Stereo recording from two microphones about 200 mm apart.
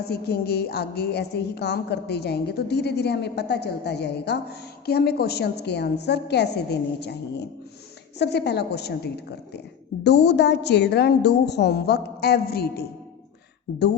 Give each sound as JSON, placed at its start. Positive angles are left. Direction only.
{"t": 0.1, "sound": "a woman's voice", "side_deg": 55}